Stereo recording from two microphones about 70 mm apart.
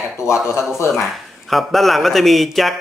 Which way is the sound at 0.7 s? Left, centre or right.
Left.